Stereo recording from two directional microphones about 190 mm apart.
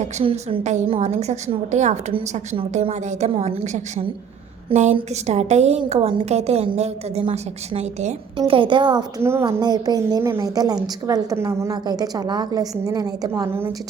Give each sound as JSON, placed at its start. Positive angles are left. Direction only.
{"t": 0.0, "sound": "a woman's voice", "side_deg": -35}